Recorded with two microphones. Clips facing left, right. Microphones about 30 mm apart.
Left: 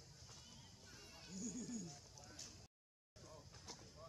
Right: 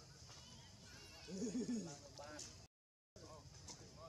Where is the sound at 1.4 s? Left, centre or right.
Right.